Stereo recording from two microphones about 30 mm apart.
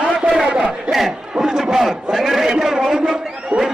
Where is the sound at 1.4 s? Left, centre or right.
Centre.